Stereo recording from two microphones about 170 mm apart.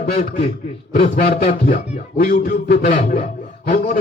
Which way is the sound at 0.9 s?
40° left (ahead or behind).